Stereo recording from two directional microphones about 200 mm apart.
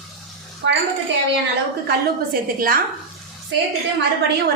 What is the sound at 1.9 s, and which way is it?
Speech, 45° right (ahead or behind).